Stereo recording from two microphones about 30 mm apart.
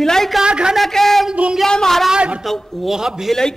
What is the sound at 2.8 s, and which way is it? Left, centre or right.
Speech, centre.